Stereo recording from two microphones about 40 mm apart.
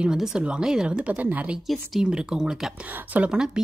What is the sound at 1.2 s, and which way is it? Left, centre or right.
Speech, right.